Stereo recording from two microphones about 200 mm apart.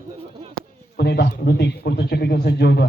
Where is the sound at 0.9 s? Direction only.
55° left (ahead or behind).